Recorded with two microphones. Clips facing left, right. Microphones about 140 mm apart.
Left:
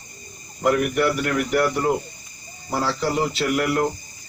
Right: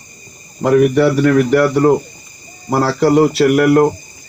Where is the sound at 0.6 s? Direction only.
90° right; by 1.6 s 75° right (ahead or behind).